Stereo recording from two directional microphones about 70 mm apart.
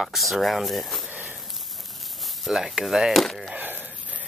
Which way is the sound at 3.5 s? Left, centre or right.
Right.